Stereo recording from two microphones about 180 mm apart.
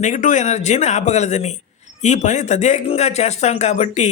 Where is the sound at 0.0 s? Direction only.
45° left (ahead or behind).